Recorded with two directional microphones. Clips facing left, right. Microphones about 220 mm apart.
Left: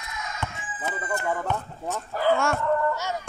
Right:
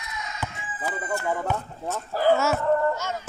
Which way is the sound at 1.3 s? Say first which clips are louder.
Right 1 dB; 5° right (ahead or behind).